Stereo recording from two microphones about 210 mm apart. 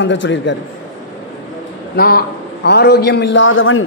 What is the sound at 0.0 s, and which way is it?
Speech, 60° left (ahead or behind).